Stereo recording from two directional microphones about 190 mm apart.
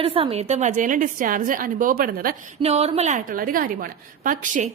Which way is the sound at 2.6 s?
35° right (ahead or behind).